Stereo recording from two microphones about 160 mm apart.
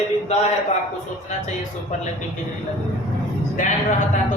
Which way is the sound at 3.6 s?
50° left (ahead or behind).